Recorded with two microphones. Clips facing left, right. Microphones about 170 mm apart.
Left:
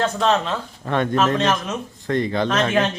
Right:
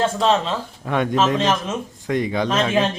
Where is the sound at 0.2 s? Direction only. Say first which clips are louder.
Right 1 dB; 10° right (ahead or behind).